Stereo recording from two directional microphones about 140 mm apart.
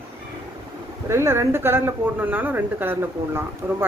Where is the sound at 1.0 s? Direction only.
20° right (ahead or behind).